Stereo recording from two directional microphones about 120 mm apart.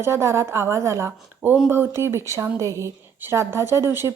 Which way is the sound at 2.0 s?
20° right (ahead or behind).